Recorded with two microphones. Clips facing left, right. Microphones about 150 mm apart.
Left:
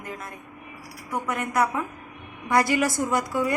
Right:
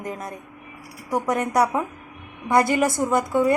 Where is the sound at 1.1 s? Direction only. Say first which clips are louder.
Right 6 dB; 35° right (ahead or behind).